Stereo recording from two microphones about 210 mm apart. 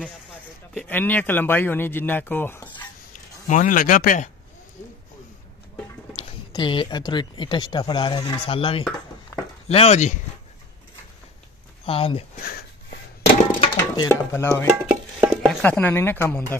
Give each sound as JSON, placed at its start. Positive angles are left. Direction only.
{"t": 0.7, "sound": "speech", "side_deg": 10}
{"t": 3.4, "sound": "speech", "side_deg": 40}
{"t": 6.1, "sound": "speech", "side_deg": 25}
{"t": 11.8, "sound": "speech", "side_deg": 25}
{"t": 12.4, "sound": "a sound", "side_deg": 50}
{"t": 13.6, "sound": "speech", "side_deg": 20}
{"t": 14.9, "sound": "a sound", "side_deg": -5}